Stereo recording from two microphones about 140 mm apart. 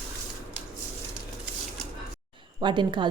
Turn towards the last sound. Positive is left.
turn(degrees=-35)  # may be behind; listen again after turning